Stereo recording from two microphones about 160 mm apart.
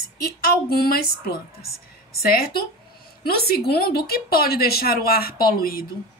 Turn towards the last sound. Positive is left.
turn(degrees=70)  # may be behind; listen again after turning